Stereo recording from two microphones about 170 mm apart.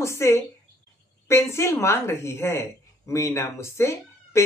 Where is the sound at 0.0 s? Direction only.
15° left (ahead or behind).